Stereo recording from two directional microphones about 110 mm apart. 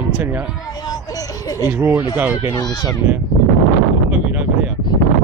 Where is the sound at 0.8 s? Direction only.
35° left (ahead or behind).